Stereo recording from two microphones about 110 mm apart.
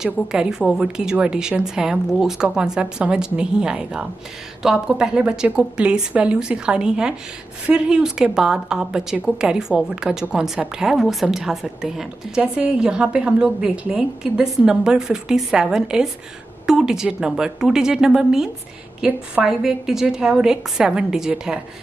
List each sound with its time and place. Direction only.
0.0 s a woman's voice: 5° right (ahead or behind)